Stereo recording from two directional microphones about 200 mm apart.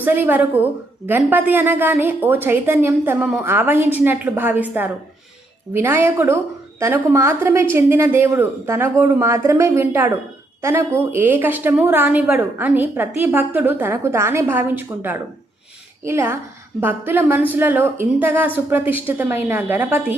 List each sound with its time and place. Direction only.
0.0 s a woman's voice: 10° right (ahead or behind)